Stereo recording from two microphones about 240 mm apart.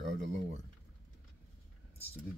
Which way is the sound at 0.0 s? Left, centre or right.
Right.